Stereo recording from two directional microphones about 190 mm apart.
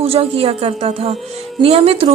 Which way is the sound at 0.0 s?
30° right (ahead or behind).